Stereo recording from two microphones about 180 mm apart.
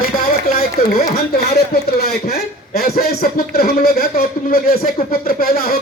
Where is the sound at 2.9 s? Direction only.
55° left (ahead or behind).